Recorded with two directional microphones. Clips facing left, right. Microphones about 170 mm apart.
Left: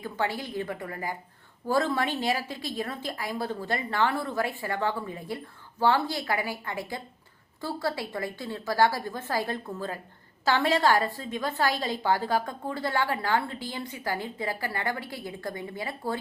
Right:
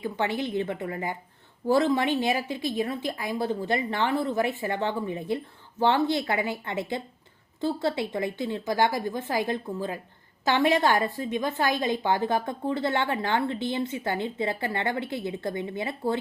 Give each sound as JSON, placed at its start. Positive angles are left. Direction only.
{"t": 0.0, "sound": "a woman's voice", "side_deg": -20}